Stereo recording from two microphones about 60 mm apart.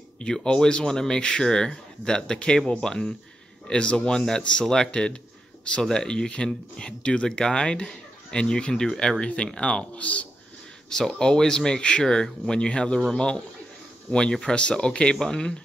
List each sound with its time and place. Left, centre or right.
0.2 s speech: centre
10.9 s speech: centre